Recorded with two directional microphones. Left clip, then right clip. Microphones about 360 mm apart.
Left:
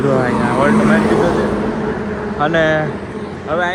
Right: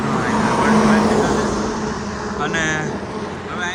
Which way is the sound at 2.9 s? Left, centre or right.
Right.